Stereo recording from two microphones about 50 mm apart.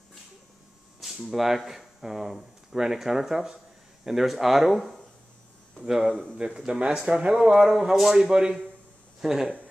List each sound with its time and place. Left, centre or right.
1.0 s speech: centre